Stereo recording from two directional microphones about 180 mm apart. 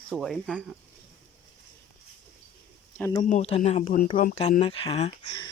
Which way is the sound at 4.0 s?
50° left (ahead or behind).